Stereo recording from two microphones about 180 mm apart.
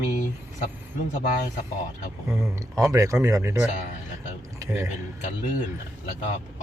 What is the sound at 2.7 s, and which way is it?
Speech, 15° right (ahead or behind).